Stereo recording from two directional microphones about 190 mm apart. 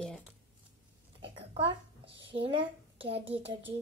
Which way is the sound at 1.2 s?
30° right (ahead or behind).